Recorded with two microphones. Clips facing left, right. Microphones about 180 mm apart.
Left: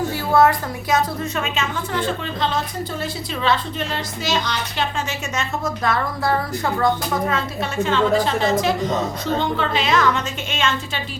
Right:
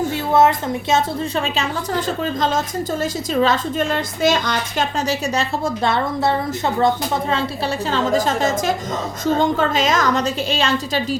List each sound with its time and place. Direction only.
0.3 s a woman's voice: 25° right (ahead or behind)